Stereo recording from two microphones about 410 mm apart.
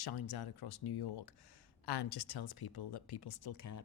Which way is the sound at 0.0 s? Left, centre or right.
Left.